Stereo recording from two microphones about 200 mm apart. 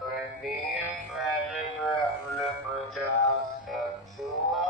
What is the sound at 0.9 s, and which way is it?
Music, centre (ahead or behind).